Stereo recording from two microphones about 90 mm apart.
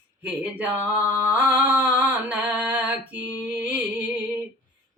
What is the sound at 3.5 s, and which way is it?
Music, 20° right (ahead or behind).